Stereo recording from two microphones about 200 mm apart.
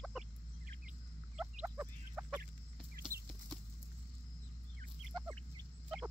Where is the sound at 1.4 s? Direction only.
5° right (ahead or behind).